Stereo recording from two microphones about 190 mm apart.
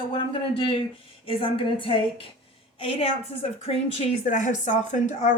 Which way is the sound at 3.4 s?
30° left (ahead or behind).